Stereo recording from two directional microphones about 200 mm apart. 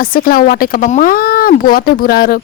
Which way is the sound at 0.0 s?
45° left (ahead or behind).